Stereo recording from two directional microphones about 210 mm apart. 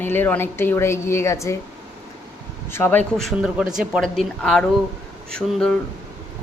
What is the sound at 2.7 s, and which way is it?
Speech, 10° left (ahead or behind).